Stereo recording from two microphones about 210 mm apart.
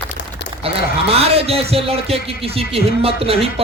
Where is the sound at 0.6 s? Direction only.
30° right (ahead or behind).